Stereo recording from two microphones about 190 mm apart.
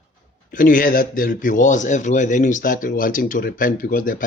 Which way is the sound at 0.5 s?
45° left (ahead or behind).